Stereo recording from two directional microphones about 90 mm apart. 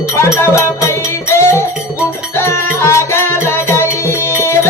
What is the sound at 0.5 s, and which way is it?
Music, 30° left (ahead or behind).